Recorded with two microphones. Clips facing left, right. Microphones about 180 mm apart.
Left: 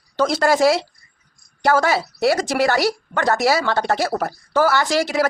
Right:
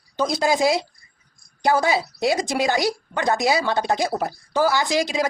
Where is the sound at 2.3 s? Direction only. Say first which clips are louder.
Left 2 dB; 15° right (ahead or behind).